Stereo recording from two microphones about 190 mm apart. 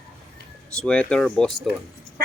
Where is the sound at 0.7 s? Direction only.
5° left (ahead or behind).